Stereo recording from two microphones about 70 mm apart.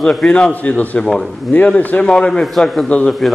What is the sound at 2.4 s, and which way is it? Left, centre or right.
Speech, centre.